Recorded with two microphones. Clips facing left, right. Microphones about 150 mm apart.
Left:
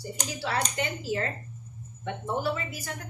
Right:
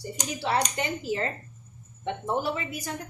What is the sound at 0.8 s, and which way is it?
Speech, 30° right (ahead or behind).